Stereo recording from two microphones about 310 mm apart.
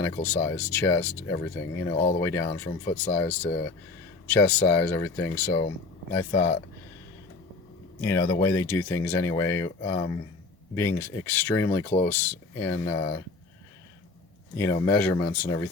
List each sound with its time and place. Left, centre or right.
0.0 s speech: centre
8.0 s speech: centre
13.0 s speech: centre
14.5 s speech: centre